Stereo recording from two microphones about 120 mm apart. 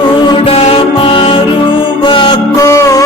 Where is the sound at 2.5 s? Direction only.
25° left (ahead or behind).